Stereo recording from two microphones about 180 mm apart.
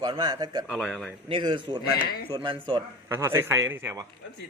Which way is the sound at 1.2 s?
30° right (ahead or behind).